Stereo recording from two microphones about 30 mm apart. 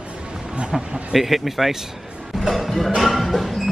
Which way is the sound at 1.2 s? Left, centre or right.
Centre.